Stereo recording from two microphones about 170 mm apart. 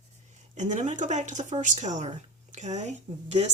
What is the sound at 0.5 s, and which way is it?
Speech, 45° right (ahead or behind).